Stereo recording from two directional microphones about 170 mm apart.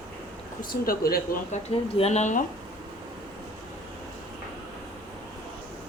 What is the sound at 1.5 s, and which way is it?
Speech, 40° left (ahead or behind).